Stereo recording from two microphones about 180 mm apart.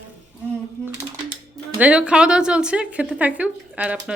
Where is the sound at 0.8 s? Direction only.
15° right (ahead or behind).